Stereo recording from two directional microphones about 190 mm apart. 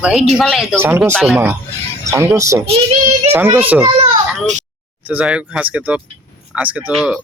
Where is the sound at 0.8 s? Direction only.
10° right (ahead or behind).